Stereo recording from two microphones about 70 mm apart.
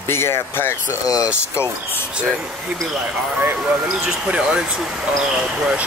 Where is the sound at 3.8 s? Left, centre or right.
Centre.